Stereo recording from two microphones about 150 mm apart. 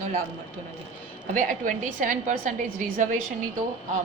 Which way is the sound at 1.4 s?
60° right (ahead or behind).